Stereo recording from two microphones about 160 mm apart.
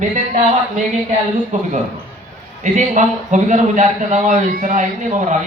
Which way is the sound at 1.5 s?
50° right (ahead or behind).